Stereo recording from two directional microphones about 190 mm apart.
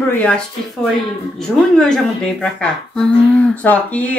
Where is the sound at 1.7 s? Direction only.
5° left (ahead or behind).